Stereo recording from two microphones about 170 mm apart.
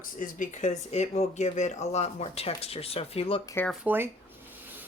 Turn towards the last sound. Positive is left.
turn(degrees=-10)  # may be behind; listen again after turning